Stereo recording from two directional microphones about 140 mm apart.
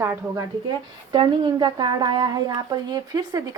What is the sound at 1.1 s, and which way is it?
Speech, 35° right (ahead or behind).